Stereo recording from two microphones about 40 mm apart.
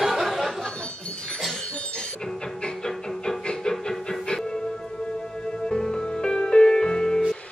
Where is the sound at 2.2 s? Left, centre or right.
Centre.